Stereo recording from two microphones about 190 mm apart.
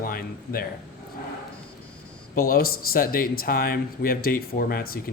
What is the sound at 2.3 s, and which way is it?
Speech, 50° left (ahead or behind).